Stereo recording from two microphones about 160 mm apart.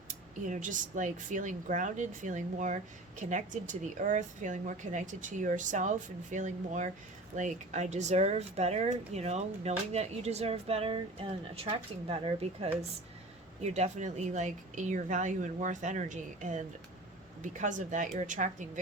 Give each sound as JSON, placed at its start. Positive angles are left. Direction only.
{"t": 0.1, "sound": "speech", "side_deg": -55}